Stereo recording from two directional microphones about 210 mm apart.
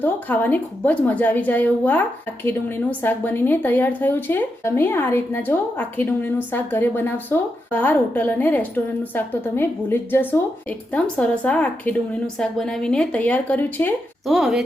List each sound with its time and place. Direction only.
0.0 s speech: 10° left (ahead or behind)